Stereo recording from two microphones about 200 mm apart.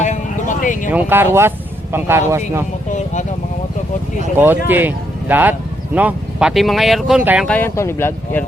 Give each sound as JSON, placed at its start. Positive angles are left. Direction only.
{"t": 0.0, "sound": "a sound", "side_deg": 40}
{"t": 0.9, "sound": "speech", "side_deg": -10}
{"t": 2.9, "sound": "speech", "side_deg": 35}
{"t": 4.4, "sound": "speech", "side_deg": -10}